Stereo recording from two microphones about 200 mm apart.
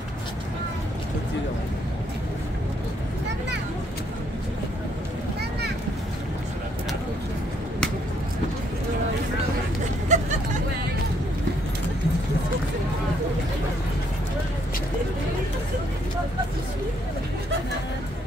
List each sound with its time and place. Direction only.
10.1 s hubbub: 35° right (ahead or behind)